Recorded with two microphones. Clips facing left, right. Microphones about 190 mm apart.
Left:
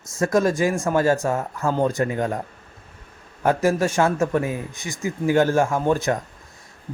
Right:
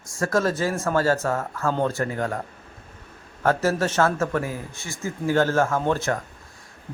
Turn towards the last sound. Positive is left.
turn(degrees=15)  # may be behind; listen again after turning